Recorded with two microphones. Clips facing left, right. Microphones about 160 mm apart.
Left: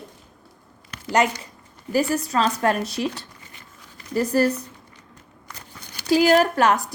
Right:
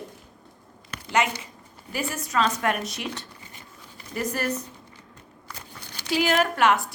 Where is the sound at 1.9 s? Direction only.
35° left (ahead or behind).